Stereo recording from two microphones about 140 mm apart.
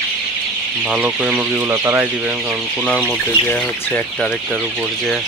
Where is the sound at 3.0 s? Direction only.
10° left (ahead or behind).